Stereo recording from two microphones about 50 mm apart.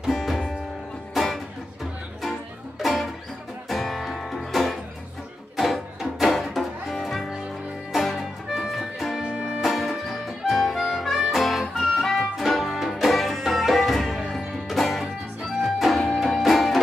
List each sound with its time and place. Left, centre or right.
0.1 s music: centre
2.8 s music: centre
9.2 s music: centre
9.6 s music: centre